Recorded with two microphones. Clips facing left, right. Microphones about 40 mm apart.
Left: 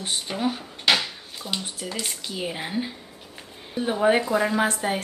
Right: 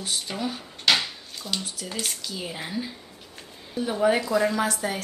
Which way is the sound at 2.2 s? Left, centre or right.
Left.